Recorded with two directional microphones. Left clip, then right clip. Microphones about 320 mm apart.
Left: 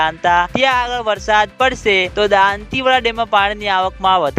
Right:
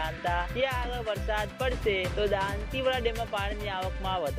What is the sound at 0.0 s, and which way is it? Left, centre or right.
Music, left.